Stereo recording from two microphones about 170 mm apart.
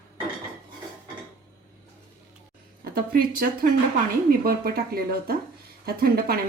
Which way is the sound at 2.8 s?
60° right (ahead or behind).